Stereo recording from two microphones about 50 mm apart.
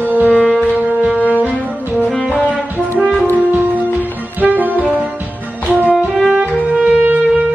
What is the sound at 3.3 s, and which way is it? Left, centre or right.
Music, right.